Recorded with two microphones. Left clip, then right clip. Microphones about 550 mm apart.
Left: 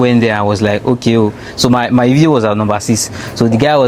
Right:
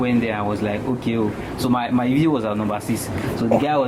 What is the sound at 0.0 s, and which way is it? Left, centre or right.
Speech, left.